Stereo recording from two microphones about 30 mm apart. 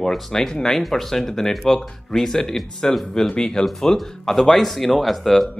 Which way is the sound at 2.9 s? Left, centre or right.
Left.